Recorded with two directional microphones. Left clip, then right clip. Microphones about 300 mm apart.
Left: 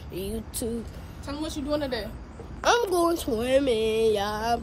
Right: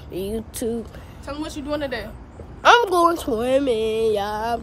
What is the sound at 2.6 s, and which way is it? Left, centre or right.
Speech, centre.